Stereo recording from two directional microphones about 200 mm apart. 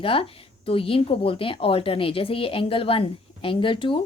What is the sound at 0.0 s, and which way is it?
A woman's voice, 30° left (ahead or behind).